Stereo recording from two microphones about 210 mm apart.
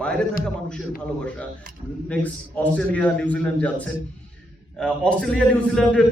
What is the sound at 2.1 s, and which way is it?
A man's voice, 5° left (ahead or behind).